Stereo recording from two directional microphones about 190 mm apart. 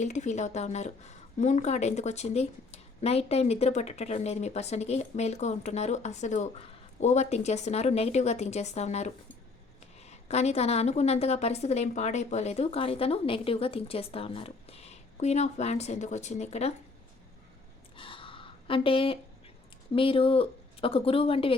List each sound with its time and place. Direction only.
0.0 s speech: 40° left (ahead or behind)
17.9 s a sound: 25° left (ahead or behind)
19.9 s speech: 30° left (ahead or behind)